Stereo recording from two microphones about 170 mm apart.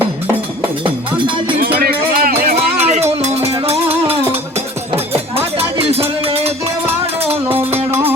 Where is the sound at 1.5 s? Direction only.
60° right (ahead or behind).